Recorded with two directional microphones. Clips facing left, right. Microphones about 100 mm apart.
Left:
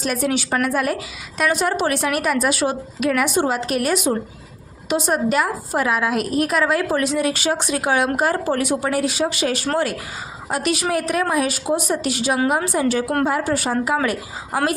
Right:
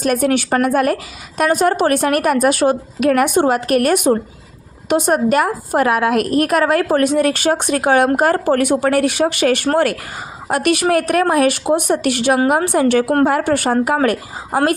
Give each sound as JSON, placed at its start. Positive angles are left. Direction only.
{"t": 0.0, "sound": "a woman's voice", "side_deg": -50}
{"t": 13.8, "sound": "a woman's voice", "side_deg": -50}